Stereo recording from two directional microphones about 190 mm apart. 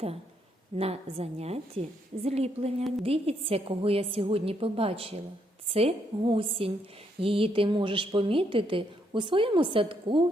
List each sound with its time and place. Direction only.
0.8 s a woman's voice: 30° right (ahead or behind)